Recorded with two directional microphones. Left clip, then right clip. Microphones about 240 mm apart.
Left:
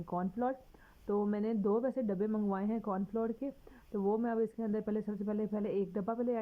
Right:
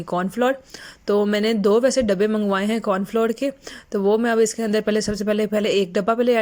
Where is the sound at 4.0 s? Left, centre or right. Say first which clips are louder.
Right 15 dB; right.